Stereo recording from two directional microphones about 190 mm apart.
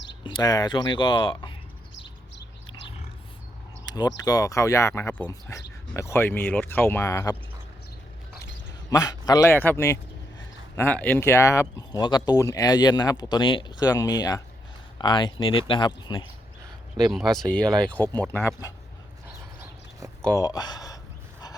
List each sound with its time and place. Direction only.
0.3 s speech: 20° left (ahead or behind)
3.8 s speech: 20° left (ahead or behind)
8.9 s speech: 20° left (ahead or behind)
17.1 s speech: centre (ahead or behind)
20.2 s speech: 15° left (ahead or behind)